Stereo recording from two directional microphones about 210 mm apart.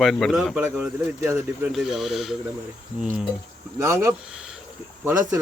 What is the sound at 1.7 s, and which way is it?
Speech, centre (ahead or behind).